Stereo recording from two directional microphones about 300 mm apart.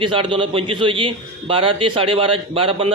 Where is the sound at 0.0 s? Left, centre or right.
Centre.